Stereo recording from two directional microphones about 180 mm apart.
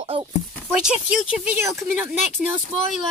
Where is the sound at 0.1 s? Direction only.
30° right (ahead or behind).